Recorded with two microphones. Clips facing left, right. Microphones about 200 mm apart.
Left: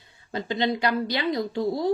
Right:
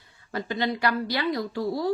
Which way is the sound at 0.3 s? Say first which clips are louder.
Left 2 dB; 20° left (ahead or behind).